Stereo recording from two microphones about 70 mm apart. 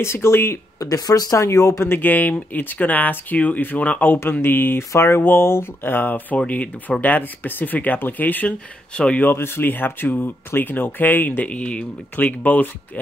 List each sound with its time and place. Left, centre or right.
0.0 s speech: left
0.7 s speech: left
1.4 s speech: left
1.9 s speech: left
4.2 s speech: left; by 9.2 s centre
9.2 s speech: left